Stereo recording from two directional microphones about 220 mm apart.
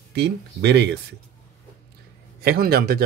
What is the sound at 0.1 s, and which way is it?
Speech, 50° right (ahead or behind).